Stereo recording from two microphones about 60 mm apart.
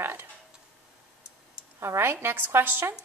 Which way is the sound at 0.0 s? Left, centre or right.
Right.